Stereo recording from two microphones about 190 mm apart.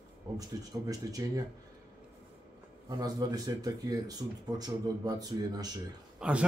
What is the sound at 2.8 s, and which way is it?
Speech, 20° right (ahead or behind).